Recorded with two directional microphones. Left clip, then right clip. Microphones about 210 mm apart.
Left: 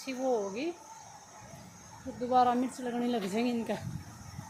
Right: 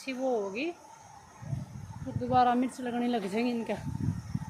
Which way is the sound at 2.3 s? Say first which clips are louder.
Right 1 dB; 10° right (ahead or behind).